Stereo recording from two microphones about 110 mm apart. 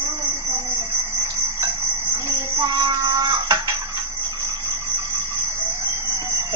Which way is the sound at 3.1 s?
30° right (ahead or behind).